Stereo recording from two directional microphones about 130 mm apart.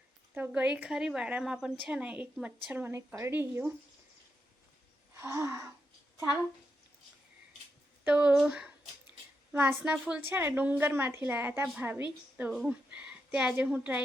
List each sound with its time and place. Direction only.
0.3 s a woman's voice: 15° right (ahead or behind)
5.2 s gasp: 20° right (ahead or behind)
8.0 s a woman's voice: 15° right (ahead or behind)
12.4 s a woman's voice: 5° right (ahead or behind)